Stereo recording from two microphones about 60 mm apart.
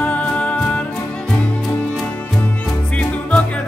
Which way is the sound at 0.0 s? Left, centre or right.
Left.